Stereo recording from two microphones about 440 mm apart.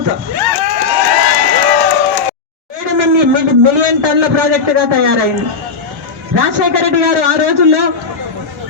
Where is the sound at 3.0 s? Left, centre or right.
Right.